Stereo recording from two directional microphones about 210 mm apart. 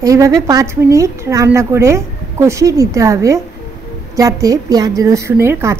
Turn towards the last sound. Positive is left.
turn(degrees=-10)  # may be behind; listen again after turning